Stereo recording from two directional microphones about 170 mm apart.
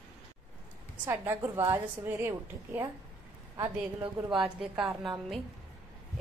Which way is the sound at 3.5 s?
25° right (ahead or behind).